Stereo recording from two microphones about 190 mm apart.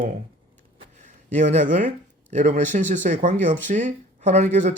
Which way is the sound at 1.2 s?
40° right (ahead or behind).